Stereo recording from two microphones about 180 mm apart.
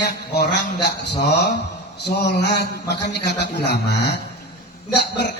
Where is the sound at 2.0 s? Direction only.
70° left (ahead or behind).